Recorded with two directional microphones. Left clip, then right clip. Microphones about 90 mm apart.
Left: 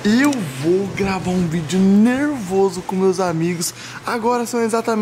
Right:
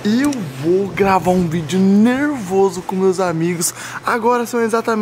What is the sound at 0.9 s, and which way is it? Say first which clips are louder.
Speech: right 8 dB; 35° right (ahead or behind).